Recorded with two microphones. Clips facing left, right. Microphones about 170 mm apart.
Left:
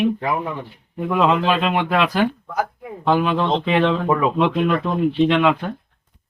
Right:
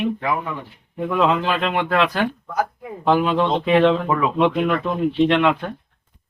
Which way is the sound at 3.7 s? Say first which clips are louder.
Right 4 dB; centre (ahead or behind).